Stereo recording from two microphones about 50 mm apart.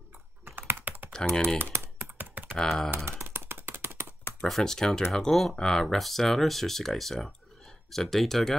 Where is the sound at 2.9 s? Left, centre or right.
Right.